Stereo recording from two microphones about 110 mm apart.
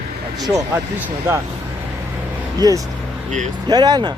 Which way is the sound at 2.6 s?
35° right (ahead or behind).